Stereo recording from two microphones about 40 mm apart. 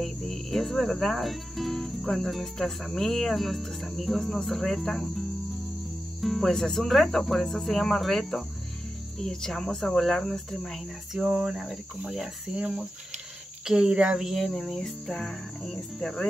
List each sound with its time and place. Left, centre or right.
0.0 s cricket: centre
6.2 s cricket: centre
6.5 s speech: centre
11.1 s cricket: centre
11.5 s cricket: centre
12.5 s speech: right
14.2 s cricket: centre
15.7 s speech: centre